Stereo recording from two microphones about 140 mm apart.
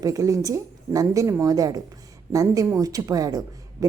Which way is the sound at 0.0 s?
25° right (ahead or behind).